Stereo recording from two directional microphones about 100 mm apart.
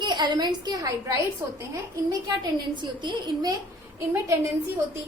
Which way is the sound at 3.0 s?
45° right (ahead or behind).